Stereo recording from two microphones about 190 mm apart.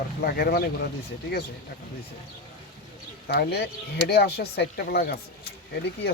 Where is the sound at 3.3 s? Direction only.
60° left (ahead or behind).